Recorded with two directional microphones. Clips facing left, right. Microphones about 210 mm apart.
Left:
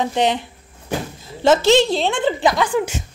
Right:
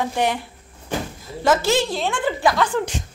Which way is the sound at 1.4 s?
25° left (ahead or behind).